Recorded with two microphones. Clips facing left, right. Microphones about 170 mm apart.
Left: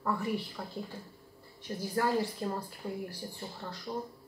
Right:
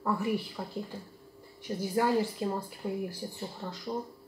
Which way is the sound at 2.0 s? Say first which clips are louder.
Right 3 dB; 15° right (ahead or behind).